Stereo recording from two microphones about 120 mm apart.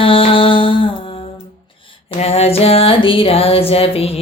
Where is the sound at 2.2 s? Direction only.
60° left (ahead or behind).